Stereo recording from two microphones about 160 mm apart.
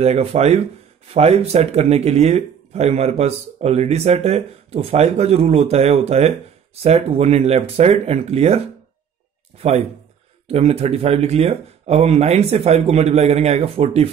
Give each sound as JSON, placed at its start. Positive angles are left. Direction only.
{"t": 0.0, "sound": "speech", "side_deg": -40}
{"t": 9.6, "sound": "a man's voice", "side_deg": -40}